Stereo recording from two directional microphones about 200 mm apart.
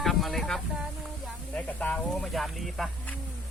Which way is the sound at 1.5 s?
5° left (ahead or behind).